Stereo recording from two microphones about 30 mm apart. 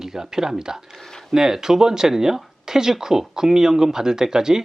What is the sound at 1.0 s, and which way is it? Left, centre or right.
Speech, centre.